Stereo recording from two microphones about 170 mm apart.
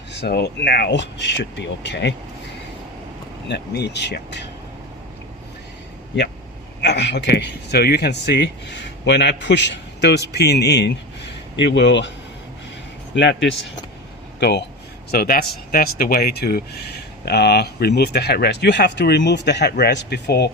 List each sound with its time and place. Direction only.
0.1 s a man's voice: 80° left
3.5 s speech: 80° left
6.8 s a man's voice: 90° left
13.1 s speech: 90° left
14.3 s speech: 80° left
15.1 s speech: 65° left (ahead or behind)